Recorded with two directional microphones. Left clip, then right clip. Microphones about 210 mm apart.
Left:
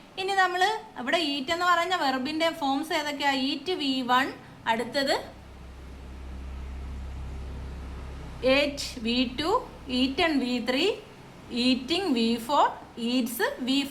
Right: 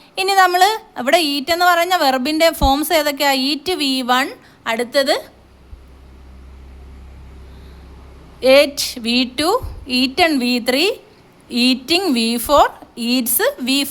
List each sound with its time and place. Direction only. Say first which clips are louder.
0.2 s a woman's voice: right 12 dB; 55° right (ahead or behind)
8.4 s a woman's voice: right 12 dB; 55° right (ahead or behind)